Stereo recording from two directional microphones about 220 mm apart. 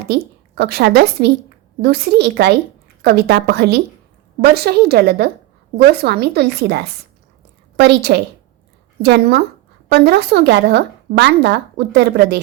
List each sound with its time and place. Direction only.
0.1 s a woman's voice: 45° right (ahead or behind)